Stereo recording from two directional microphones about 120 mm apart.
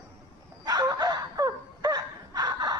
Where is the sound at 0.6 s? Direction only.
30° right (ahead or behind).